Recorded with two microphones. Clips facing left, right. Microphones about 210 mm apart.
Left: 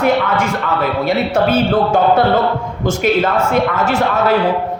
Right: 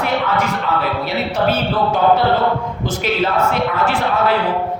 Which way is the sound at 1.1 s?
50° left (ahead or behind).